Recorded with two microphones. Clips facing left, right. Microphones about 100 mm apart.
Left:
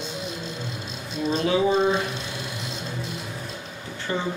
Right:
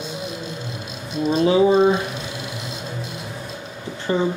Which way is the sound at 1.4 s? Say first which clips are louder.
Right 6 dB; 20° right (ahead or behind).